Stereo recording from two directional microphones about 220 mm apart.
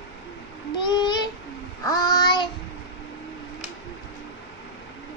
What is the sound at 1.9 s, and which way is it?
Child singing, 15° left (ahead or behind).